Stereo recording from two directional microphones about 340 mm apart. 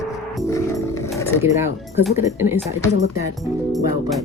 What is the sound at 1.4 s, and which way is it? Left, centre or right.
Speech, centre.